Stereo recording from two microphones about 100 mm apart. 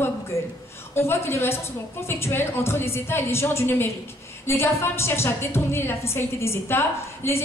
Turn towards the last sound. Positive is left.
turn(degrees=25)  # may be behind; listen again after turning